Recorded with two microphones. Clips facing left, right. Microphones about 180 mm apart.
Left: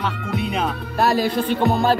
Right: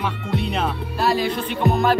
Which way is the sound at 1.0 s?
45° left (ahead or behind).